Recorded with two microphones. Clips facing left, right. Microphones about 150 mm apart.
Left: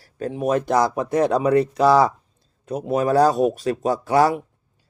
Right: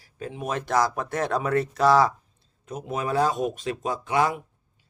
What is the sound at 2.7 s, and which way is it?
Speech, 35° left (ahead or behind).